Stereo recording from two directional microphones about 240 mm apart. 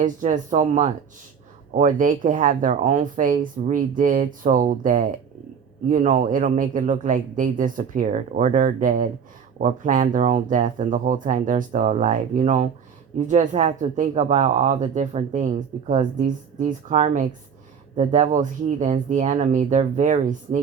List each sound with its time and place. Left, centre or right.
0.0 s speech: right